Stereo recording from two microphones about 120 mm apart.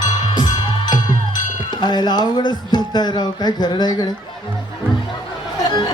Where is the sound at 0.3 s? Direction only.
35° left (ahead or behind).